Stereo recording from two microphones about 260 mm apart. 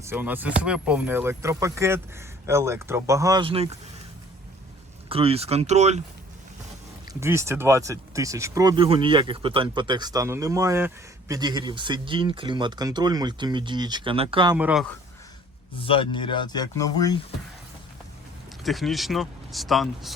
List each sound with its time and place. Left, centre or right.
0.0 s speech: centre
5.0 s speech: right
7.1 s speech: centre
14.5 s speech: centre
15.8 s speech: left
18.6 s speech: centre